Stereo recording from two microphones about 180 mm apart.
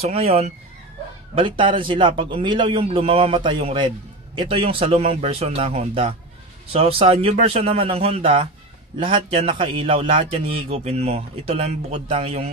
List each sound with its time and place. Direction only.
0.0 s a man's voice: 35° right (ahead or behind)